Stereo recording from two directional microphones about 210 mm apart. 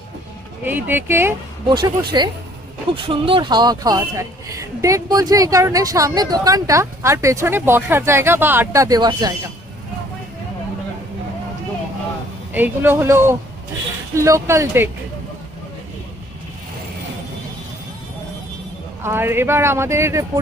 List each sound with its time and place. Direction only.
0.7 s speech: 10° right (ahead or behind)
12.5 s speech: 10° right (ahead or behind)
19.0 s speech: 10° right (ahead or behind)